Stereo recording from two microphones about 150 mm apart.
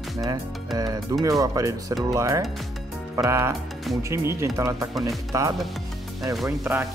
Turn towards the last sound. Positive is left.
turn(degrees=-15)  # may be behind; listen again after turning